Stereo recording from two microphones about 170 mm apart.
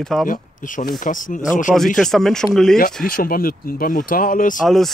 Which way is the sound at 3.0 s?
60° left (ahead or behind).